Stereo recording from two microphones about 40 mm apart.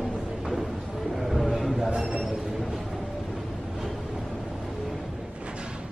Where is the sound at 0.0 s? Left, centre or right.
Centre.